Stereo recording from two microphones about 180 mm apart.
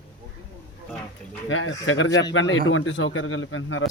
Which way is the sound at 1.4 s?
90° left.